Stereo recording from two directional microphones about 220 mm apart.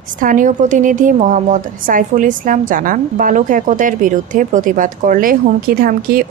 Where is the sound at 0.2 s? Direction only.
35° right (ahead or behind).